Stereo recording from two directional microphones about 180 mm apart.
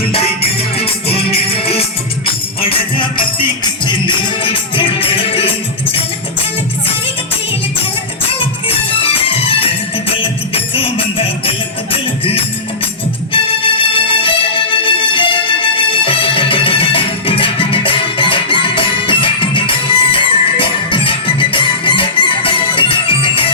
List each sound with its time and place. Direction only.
0.1 s music: 35° left (ahead or behind)
8.4 s music: 30° left (ahead or behind)